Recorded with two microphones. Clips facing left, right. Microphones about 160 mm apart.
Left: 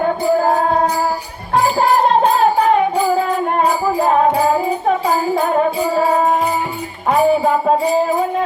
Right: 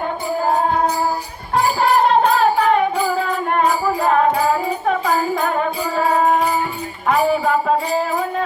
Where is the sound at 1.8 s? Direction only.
40° left (ahead or behind).